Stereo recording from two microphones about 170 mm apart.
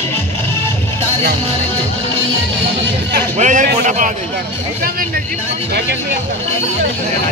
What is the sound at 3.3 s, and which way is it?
Speech, 45° right (ahead or behind).